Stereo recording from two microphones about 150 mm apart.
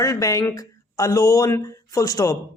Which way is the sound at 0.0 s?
25° left (ahead or behind).